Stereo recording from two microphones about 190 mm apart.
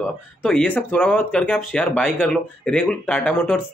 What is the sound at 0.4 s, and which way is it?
Speech, 5° left (ahead or behind).